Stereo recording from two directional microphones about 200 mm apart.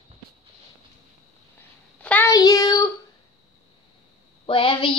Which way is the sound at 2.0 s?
10° left (ahead or behind).